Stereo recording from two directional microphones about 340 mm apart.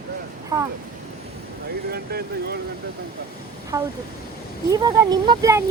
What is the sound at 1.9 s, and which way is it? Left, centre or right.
Speech, right.